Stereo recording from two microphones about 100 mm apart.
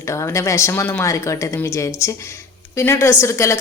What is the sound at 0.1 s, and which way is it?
A woman's voice, 30° left (ahead or behind).